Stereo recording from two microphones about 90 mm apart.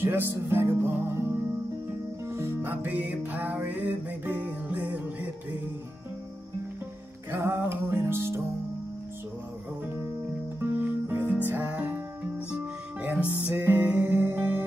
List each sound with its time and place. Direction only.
0.0 s music: 25° right (ahead or behind)
7.2 s music: 25° right (ahead or behind)
10.6 s music: 25° right (ahead or behind)
13.3 s music: 30° right (ahead or behind)